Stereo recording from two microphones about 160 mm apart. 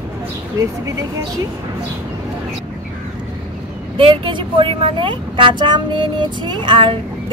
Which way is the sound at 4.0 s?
30° right (ahead or behind).